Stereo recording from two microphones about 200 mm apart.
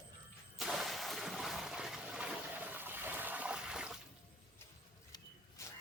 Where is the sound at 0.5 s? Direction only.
Centre (ahead or behind).